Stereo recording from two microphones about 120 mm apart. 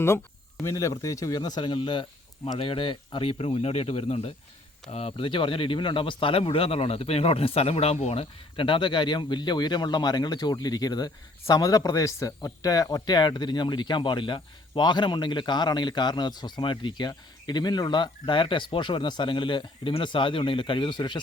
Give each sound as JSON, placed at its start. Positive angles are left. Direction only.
{"t": 0.6, "sound": "speech", "side_deg": 25}
{"t": 1.7, "sound": "speech", "side_deg": 45}